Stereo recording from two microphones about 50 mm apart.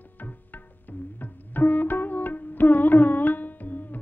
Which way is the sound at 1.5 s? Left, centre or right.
Left.